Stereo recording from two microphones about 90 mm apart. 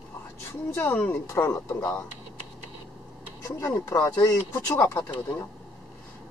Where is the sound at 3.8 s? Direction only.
30° left (ahead or behind).